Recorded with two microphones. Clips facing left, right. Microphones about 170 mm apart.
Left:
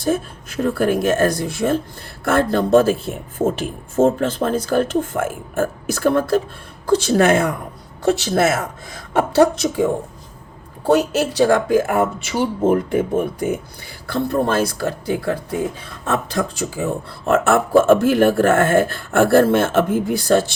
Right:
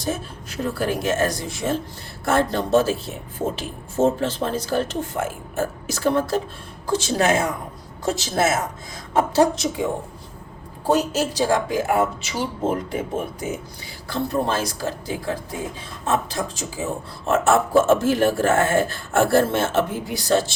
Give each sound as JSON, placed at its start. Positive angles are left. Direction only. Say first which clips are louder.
{"t": 0.0, "sound": "speech", "louder": "left 7 dB", "side_deg": 55}
{"t": 14.1, "sound": "speech", "louder": "left 4 dB", "side_deg": 55}